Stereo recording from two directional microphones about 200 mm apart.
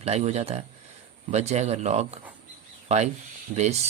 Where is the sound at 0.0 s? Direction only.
35° right (ahead or behind).